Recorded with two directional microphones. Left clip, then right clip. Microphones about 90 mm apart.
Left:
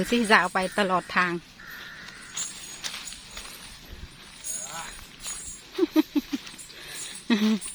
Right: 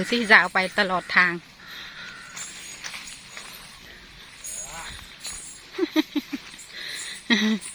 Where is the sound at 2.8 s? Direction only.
25° left (ahead or behind).